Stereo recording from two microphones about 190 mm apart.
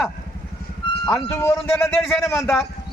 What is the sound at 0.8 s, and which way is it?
Vehicle, 25° left (ahead or behind).